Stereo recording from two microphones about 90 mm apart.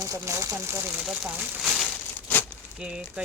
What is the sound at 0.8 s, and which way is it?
Speech, 10° right (ahead or behind).